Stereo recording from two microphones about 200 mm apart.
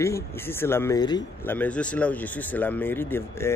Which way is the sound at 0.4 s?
10° left (ahead or behind).